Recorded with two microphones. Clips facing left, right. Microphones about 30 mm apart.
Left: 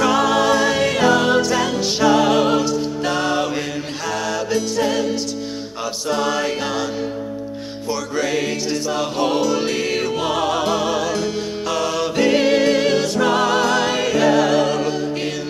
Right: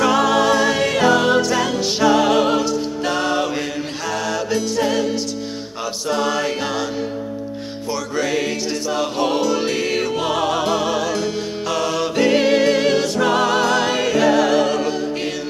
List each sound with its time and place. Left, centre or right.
0.0 s music: centre
7.9 s music: right